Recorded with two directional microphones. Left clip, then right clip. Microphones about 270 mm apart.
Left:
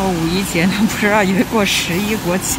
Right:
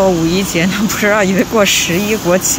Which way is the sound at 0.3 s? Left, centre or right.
Centre.